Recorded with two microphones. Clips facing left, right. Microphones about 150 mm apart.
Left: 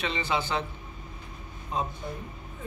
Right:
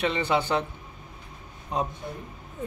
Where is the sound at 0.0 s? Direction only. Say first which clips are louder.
Right 5 dB; 55° right (ahead or behind).